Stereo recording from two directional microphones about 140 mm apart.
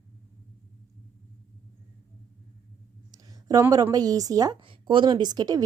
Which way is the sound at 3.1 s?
25° right (ahead or behind).